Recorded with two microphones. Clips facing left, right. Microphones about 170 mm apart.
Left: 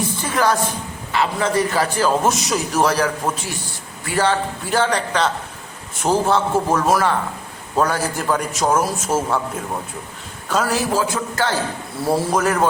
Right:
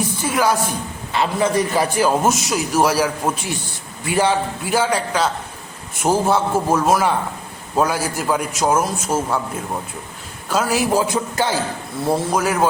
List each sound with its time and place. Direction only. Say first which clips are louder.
0.2 s speech: right 1 dB; 10° right (ahead or behind)
1.1 s a man's voice: right 1 dB; 20° right (ahead or behind); by 9.4 s centre (ahead or behind)
10.5 s a man's voice: right 2 dB; 5° right (ahead or behind)
12.0 s a man's voice: left 1 dB; 5° left (ahead or behind)